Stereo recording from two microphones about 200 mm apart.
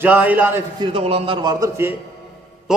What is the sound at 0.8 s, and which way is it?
A man's voice, 30° right (ahead or behind).